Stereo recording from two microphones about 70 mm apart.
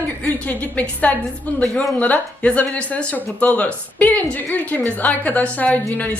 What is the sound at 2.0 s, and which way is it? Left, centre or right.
A woman's voice, left.